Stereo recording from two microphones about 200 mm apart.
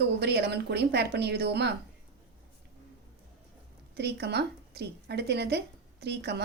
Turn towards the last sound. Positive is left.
turn(degrees=-55)  # may be behind; listen again after turning